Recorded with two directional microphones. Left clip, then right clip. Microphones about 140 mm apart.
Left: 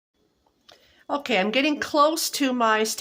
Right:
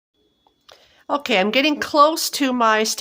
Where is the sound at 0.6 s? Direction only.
35° right (ahead or behind).